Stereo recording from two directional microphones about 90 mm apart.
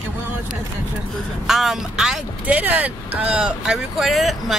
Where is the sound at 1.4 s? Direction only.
5° right (ahead or behind).